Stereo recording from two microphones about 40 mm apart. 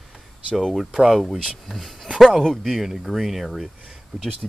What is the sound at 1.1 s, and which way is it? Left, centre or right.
Speech, centre.